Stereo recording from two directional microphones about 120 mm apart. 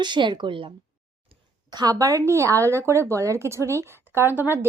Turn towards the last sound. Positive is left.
turn(degrees=-15)  # may be behind; listen again after turning